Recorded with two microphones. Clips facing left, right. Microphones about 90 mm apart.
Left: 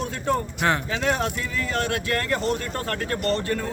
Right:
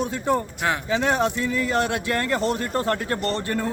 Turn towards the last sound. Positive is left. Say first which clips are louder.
# right 4 dB
turn(degrees=-25)  # may be behind; listen again after turning